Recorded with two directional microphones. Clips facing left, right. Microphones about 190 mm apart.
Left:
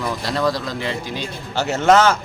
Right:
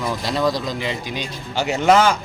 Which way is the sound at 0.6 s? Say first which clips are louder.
Even; 20° right (ahead or behind).